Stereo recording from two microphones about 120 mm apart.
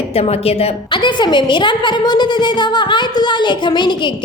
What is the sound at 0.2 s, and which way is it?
Speech, 55° left (ahead or behind).